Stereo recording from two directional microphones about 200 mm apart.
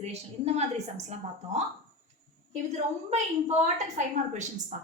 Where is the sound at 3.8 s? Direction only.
35° right (ahead or behind).